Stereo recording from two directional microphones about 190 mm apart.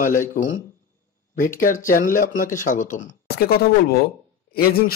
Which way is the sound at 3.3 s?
55° left (ahead or behind).